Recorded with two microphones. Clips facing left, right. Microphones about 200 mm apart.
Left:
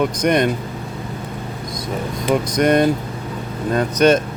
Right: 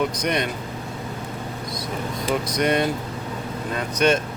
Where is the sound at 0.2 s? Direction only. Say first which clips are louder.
Left 7 dB; 50° left (ahead or behind).